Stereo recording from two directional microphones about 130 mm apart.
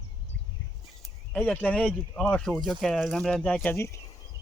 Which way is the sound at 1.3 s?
10° left (ahead or behind).